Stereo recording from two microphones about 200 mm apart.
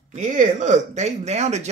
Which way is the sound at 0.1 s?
40° right (ahead or behind).